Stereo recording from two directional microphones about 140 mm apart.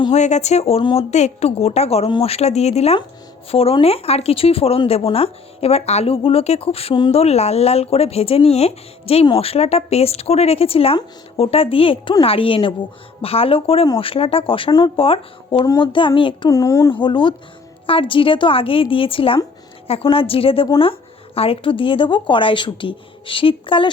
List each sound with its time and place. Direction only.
0.1 s speech: 55° left (ahead or behind); by 16.5 s 35° left (ahead or behind)
16.5 s speech: 25° left (ahead or behind)
16.9 s speech: 35° left (ahead or behind)